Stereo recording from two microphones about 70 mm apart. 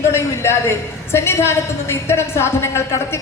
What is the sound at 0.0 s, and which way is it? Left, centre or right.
A woman's voice, left.